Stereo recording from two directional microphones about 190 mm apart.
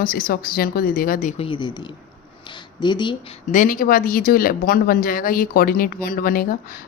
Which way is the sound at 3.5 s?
45° left (ahead or behind).